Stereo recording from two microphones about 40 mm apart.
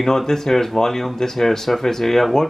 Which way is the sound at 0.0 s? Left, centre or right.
Centre.